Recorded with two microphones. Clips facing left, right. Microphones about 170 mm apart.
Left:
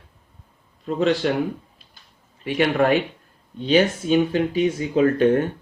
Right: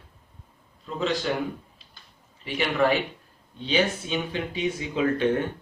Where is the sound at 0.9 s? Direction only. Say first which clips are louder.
Left 7 dB; 55° left (ahead or behind).